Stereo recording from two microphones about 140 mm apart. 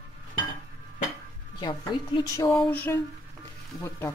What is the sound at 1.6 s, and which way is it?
Speech, 30° left (ahead or behind).